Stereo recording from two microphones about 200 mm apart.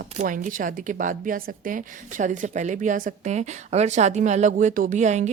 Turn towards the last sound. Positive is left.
turn(degrees=-35)  # may be behind; listen again after turning